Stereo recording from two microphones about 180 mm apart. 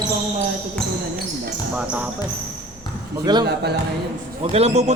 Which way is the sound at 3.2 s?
25° right (ahead or behind).